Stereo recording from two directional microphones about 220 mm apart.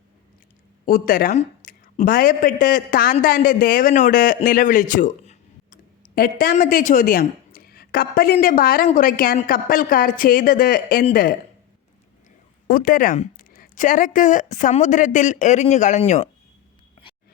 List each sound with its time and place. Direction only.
0.9 s a woman's voice: 40° left (ahead or behind)
12.6 s a woman's voice: 40° left (ahead or behind)